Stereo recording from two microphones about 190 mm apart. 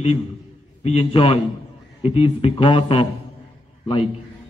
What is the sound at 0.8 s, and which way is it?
A man's voice, 30° left (ahead or behind).